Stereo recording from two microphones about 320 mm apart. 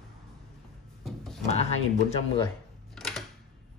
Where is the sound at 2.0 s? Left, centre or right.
Left.